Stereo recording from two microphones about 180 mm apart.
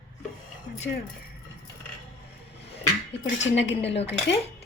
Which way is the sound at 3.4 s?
85° left.